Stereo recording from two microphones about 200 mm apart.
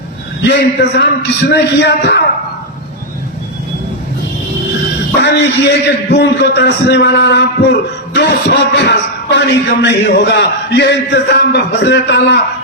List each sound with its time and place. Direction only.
0.4 s a man's voice: 55° left (ahead or behind)
5.2 s a man's voice: 60° left (ahead or behind)